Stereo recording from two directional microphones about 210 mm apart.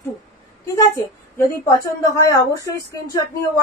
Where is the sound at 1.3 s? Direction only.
15° left (ahead or behind).